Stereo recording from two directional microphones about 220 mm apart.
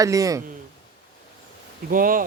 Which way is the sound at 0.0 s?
15° right (ahead or behind).